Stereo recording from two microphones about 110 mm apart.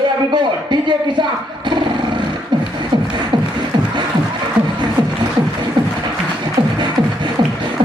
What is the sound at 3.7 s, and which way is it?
Music, 40° right (ahead or behind).